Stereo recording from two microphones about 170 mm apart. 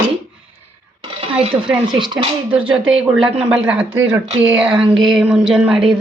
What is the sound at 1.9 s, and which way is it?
Speech, 30° right (ahead or behind).